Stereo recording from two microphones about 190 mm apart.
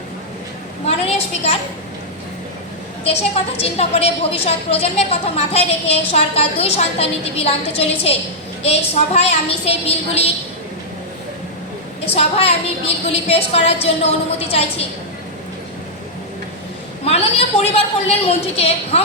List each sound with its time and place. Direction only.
0.9 s a sound: 30° left (ahead or behind)
3.0 s a woman's voice: 30° left (ahead or behind)
12.1 s a woman's voice: 30° left (ahead or behind)
17.0 s a woman's voice: 30° left (ahead or behind)